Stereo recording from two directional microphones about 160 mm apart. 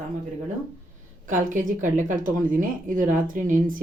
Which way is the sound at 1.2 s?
55° right (ahead or behind).